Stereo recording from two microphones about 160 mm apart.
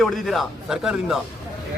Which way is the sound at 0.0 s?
Centre (ahead or behind).